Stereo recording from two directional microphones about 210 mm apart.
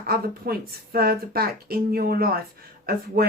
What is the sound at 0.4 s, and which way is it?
Speech, 45° right (ahead or behind).